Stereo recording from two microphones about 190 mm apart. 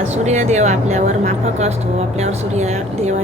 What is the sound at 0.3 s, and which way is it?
Speech, 35° right (ahead or behind).